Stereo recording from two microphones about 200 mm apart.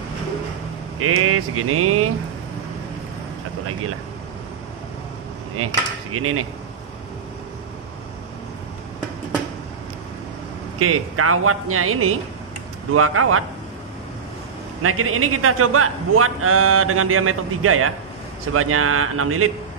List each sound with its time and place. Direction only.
0.9 s a man's voice: 90° right
5.6 s a man's voice: 90° right
10.8 s a man's voice: 90° right
14.8 s a man's voice: 90° right